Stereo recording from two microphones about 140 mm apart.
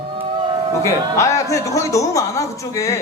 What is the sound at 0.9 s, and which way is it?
A woman's voice, 20° left (ahead or behind).